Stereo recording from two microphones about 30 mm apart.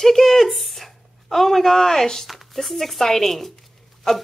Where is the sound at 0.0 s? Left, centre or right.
Centre.